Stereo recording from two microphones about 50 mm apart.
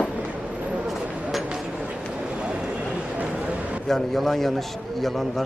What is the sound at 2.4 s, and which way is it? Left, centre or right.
Vehicle, centre.